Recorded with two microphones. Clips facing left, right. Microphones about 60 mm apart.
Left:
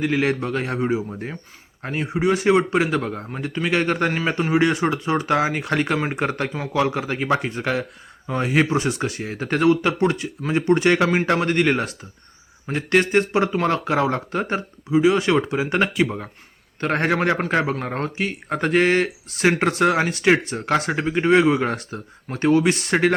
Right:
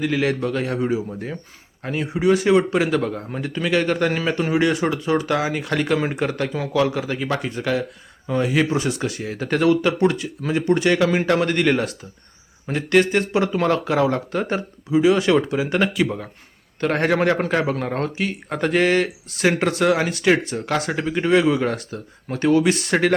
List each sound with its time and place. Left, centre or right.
0.0 s speech: left
6.5 s speech: left
10.8 s speech: left
11.0 s a man's voice: left